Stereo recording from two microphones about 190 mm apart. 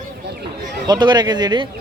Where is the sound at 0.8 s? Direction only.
20° right (ahead or behind).